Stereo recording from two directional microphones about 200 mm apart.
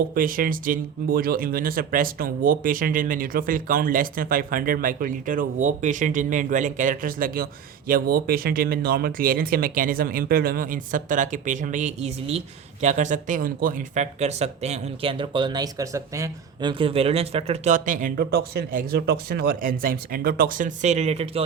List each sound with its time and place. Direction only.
0.1 s speech: 45° right (ahead or behind)